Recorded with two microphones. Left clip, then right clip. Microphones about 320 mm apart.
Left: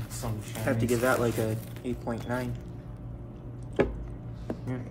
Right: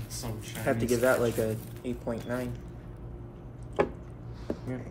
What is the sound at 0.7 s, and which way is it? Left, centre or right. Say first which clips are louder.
Speech: right 1 dB; centre.